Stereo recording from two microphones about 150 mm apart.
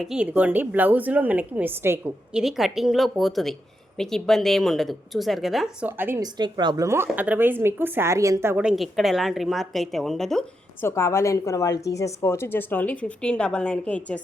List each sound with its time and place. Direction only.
0.0 s a woman's voice: 5° right (ahead or behind)
2.3 s speech: centre (ahead or behind)
6.0 s a woman's voice: 15° right (ahead or behind)
6.2 s a woman's voice: 30° right (ahead or behind)
8.6 s speech: centre (ahead or behind)
10.8 s a woman's voice: 15° left (ahead or behind)